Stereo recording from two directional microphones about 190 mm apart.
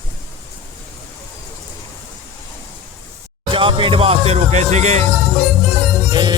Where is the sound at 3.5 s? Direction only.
25° right (ahead or behind).